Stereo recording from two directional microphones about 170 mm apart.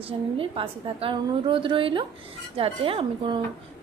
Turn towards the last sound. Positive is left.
turn(degrees=-30)  # may be behind; listen again after turning